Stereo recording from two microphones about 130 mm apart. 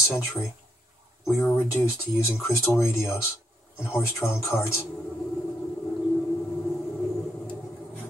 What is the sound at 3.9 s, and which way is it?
Speech, 5° right (ahead or behind).